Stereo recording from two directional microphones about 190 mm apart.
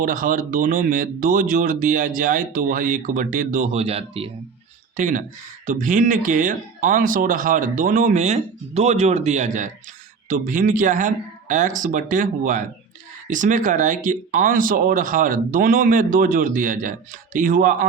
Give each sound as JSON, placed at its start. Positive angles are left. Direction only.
{"t": 0.0, "sound": "speech", "side_deg": -45}
{"t": 4.9, "sound": "speech", "side_deg": -40}